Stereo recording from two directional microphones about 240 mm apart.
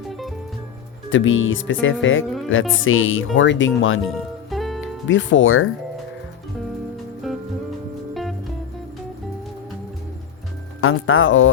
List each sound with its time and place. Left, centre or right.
0.1 s music: centre
1.1 s speech: left
2.2 s speech: centre
2.5 s speech: left
4.1 s music: centre
5.0 s speech: left
8.1 s music: centre
10.8 s speech: left